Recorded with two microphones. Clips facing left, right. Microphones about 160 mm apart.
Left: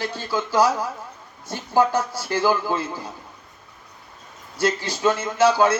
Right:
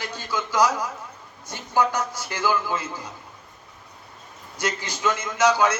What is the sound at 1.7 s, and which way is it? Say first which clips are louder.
A man's voice: left 3 dB; 35° left (ahead or behind).